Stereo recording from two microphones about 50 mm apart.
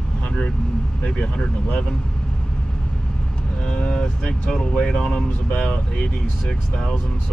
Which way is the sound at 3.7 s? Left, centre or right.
Left.